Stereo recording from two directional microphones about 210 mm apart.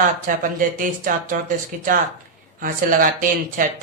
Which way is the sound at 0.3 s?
40° right (ahead or behind).